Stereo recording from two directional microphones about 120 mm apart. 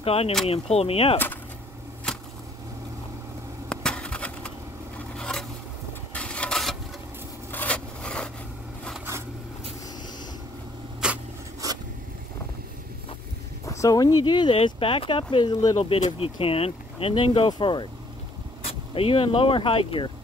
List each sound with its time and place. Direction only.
0.0 s speech: 55° left (ahead or behind)
1.1 s speech: 15° left (ahead or behind)
3.6 s a sound: 5° left (ahead or behind)
5.1 s zipper: 5° left (ahead or behind)
6.1 s a sound: 10° left (ahead or behind)
7.5 s vehicle: 10° left (ahead or behind)
11.0 s a sound: 5° right (ahead or behind)
13.7 s speech: 30° left (ahead or behind)
16.0 s speech: 50° left (ahead or behind)